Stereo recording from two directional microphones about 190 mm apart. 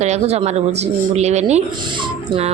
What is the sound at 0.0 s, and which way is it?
A woman's voice, 35° right (ahead or behind).